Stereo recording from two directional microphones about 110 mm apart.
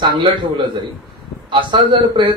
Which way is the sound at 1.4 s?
50° right (ahead or behind).